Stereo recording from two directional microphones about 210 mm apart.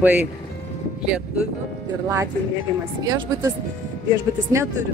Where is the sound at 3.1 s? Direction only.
15° right (ahead or behind).